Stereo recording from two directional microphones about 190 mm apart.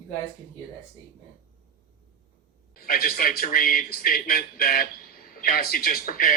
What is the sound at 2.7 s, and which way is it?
Speech, 50° left (ahead or behind).